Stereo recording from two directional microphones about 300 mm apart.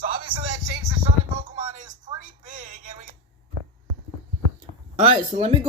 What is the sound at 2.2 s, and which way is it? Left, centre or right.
Speech, right.